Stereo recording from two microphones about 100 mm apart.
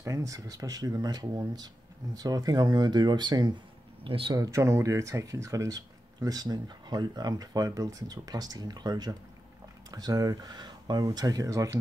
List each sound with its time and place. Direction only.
0.0 s speech: 30° right (ahead or behind)
4.0 s speech: 60° right (ahead or behind)
4.3 s speech: 35° right (ahead or behind)